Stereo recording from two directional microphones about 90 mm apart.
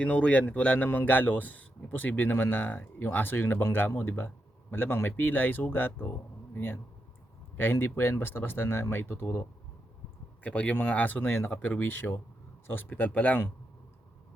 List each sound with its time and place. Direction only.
0.0 s speech: 15° left (ahead or behind)